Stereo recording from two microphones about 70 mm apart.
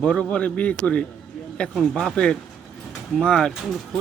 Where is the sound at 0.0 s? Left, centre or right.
Centre.